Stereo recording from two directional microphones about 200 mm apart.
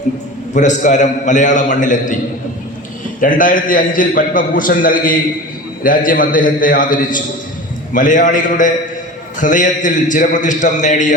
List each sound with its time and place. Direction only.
0.5 s a man's voice: 40° left (ahead or behind)
3.2 s a man's voice: 40° left (ahead or behind)